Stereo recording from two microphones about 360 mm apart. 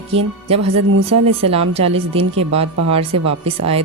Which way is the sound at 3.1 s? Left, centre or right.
Right.